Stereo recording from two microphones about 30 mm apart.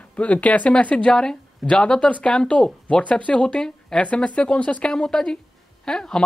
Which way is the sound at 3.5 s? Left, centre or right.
Left.